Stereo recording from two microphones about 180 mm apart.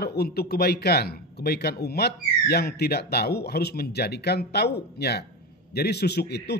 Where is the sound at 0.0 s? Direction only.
60° left (ahead or behind).